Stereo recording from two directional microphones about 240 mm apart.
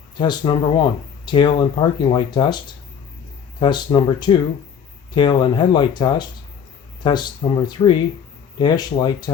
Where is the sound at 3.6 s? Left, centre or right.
Centre.